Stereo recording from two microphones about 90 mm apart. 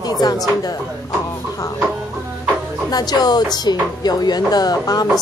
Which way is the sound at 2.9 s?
50° left (ahead or behind).